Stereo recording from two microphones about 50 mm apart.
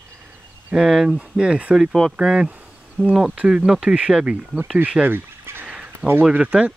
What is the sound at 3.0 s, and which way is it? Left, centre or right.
Speech, left.